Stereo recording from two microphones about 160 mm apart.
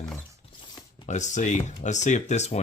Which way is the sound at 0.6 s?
30° left (ahead or behind).